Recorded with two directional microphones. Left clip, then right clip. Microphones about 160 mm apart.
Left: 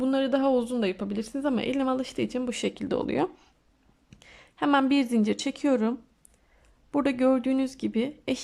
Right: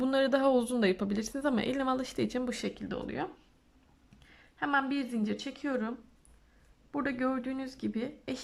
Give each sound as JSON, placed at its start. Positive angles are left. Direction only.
{"t": 0.0, "sound": "a woman's voice", "side_deg": 5}